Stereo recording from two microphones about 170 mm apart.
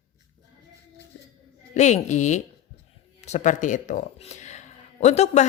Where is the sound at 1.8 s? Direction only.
45° left (ahead or behind).